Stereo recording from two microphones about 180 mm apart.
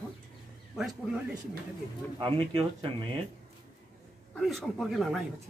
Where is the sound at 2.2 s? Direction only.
30° right (ahead or behind).